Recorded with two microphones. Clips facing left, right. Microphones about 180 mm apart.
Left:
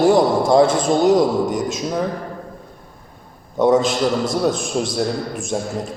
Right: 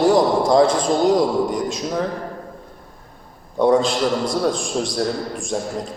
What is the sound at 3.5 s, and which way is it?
A man's voice, 20° left (ahead or behind).